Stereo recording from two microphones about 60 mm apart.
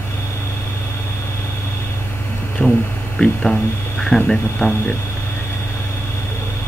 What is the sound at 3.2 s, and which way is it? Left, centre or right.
Speech, centre.